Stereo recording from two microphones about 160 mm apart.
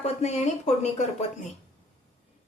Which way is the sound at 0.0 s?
45° left (ahead or behind).